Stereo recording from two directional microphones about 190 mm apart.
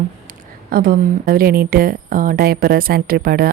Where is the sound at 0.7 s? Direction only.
50° right (ahead or behind).